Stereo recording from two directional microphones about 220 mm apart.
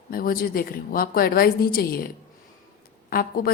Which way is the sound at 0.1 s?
40° left (ahead or behind).